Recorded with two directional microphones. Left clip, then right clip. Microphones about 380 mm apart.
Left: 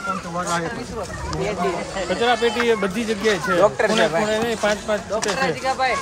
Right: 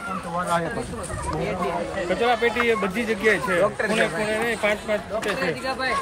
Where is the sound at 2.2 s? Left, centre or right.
Centre.